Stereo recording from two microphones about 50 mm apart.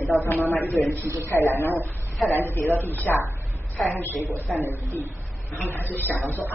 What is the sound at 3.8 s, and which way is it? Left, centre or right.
Speech, left.